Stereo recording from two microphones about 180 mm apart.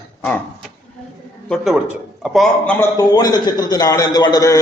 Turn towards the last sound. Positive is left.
turn(degrees=20)  # may be behind; listen again after turning